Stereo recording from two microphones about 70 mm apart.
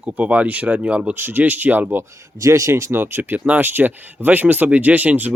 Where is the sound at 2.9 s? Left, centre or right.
Right.